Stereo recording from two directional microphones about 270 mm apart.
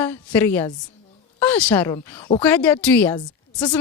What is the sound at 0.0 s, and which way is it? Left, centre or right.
Speech, centre.